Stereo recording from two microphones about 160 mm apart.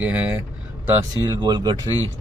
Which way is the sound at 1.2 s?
25° right (ahead or behind).